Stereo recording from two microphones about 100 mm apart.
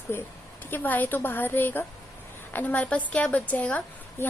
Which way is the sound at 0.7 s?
15° left (ahead or behind).